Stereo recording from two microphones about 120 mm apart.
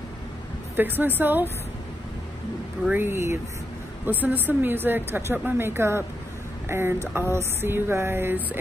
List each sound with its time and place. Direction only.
0.7 s speech: 15° right (ahead or behind)
2.9 s speech: 20° right (ahead or behind)